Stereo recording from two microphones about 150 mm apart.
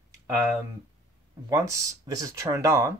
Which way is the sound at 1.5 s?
20° right (ahead or behind).